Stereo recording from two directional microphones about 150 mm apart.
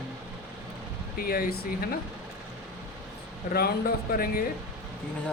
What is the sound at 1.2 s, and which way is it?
Speech, 85° left.